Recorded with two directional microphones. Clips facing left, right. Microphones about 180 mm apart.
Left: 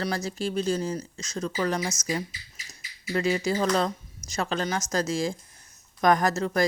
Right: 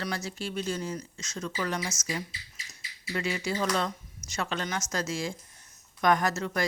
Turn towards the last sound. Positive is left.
turn(degrees=35)  # may be behind; listen again after turning